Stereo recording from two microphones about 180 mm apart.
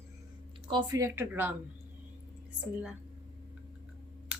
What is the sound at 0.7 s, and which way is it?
Speech, 20° right (ahead or behind).